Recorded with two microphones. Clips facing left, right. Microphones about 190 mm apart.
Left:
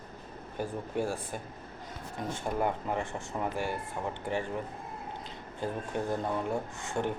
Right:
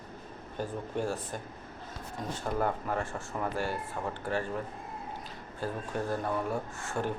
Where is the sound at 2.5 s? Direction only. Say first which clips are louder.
Even; 15° left (ahead or behind).